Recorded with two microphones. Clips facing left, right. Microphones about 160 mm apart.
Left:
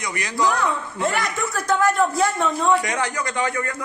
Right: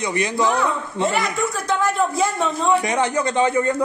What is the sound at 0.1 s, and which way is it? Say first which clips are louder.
Speech: right 1 dB; 20° right (ahead or behind).